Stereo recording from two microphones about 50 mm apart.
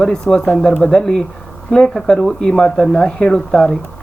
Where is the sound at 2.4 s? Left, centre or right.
Centre.